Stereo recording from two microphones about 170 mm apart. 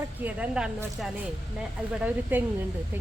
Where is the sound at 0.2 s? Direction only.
10° right (ahead or behind).